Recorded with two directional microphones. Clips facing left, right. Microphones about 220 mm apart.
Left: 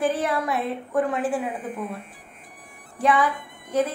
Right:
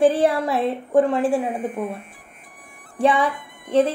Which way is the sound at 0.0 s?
30° right (ahead or behind).